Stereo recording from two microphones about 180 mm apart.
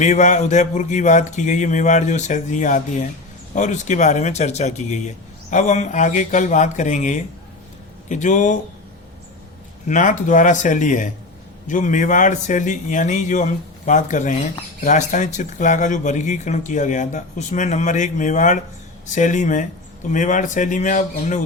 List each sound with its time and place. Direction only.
0.0 s speech: 40° left (ahead or behind)
9.8 s speech: 45° left (ahead or behind)